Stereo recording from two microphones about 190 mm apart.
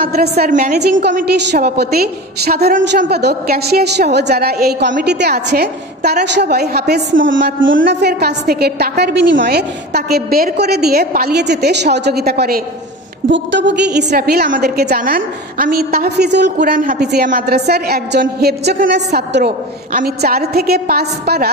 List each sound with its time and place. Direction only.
0.0 s a woman's voice: 55° right (ahead or behind)
0.7 s a woman's voice: 60° right (ahead or behind)
13.3 s a woman's voice: 70° right (ahead or behind)
16.7 s a woman's voice: 50° right (ahead or behind)